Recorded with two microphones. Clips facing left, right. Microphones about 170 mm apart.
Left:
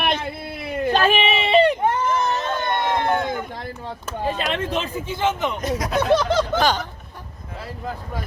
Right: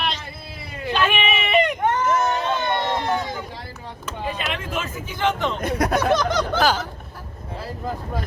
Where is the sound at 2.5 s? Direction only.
50° left (ahead or behind).